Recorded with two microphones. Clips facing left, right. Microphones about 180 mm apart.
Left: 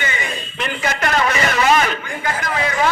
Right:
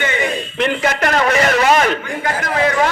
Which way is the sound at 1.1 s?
50° right (ahead or behind).